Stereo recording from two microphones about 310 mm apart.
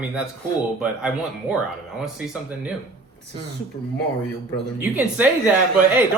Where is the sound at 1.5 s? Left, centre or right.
Centre.